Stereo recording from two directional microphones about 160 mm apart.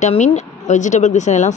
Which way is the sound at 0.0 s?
45° left (ahead or behind).